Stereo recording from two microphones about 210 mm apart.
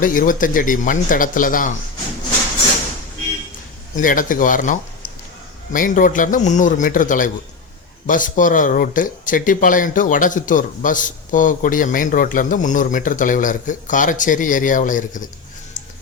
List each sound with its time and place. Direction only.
0.0 s speech: 40° left (ahead or behind)
3.9 s speech: 40° left (ahead or behind)